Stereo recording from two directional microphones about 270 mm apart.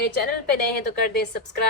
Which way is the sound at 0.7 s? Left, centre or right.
Left.